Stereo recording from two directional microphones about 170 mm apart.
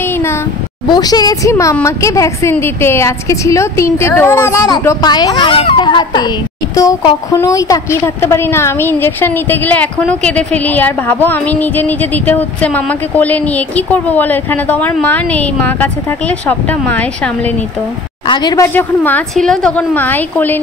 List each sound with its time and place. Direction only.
0.0 s a sound: 15° left (ahead or behind)
0.8 s a woman's voice: 25° left (ahead or behind); by 17.6 s 10° left (ahead or behind)
18.2 s a woman's voice: 25° left (ahead or behind)
18.7 s a woman's voice: 10° left (ahead or behind)